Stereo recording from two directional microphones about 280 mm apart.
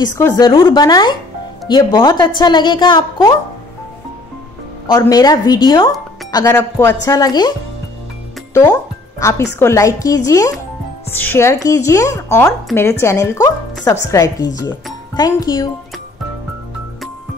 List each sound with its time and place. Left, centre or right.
0.0 s speech: centre
4.8 s speech: centre
9.2 s speech: centre